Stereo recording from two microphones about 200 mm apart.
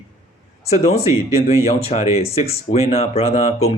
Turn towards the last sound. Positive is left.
turn(degrees=30)  # may be behind; listen again after turning